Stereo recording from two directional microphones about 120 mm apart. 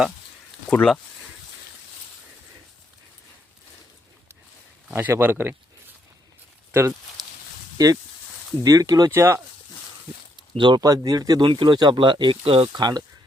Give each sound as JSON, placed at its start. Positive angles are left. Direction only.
{"t": 0.7, "sound": "speech", "side_deg": 10}
{"t": 4.9, "sound": "speech", "side_deg": -15}
{"t": 6.7, "sound": "speech", "side_deg": -20}
{"t": 10.6, "sound": "speech", "side_deg": -40}
{"t": 10.8, "sound": "speech", "side_deg": -30}